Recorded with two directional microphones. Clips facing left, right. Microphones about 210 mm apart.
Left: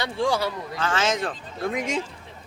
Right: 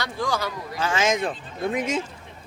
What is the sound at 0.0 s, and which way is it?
Speech, 25° left (ahead or behind).